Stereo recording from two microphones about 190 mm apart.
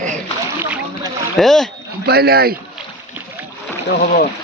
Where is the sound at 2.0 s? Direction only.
55° right (ahead or behind).